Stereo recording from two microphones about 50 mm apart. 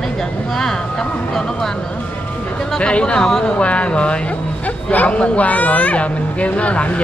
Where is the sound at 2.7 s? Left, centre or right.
Left.